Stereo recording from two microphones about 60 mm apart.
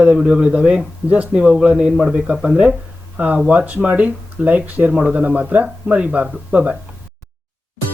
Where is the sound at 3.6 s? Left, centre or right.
Right.